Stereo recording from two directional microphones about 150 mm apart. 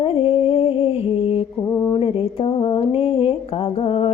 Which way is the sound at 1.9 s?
40° left (ahead or behind).